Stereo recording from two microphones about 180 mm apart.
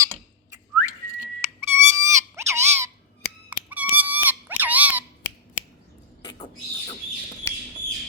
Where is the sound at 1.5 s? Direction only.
15° right (ahead or behind).